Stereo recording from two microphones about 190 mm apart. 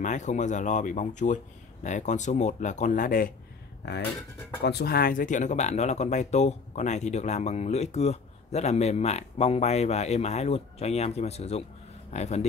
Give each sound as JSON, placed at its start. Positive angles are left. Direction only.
{"t": 0.0, "sound": "speech", "side_deg": 40}
{"t": 3.8, "sound": "speech", "side_deg": 60}